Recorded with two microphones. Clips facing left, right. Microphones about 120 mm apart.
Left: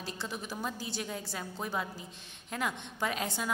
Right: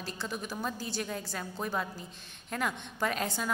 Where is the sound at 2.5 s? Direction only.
15° left (ahead or behind).